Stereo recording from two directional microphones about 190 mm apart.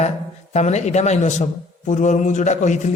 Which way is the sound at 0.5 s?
35° left (ahead or behind).